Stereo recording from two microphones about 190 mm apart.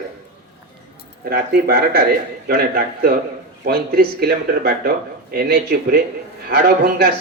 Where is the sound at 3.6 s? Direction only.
55° right (ahead or behind).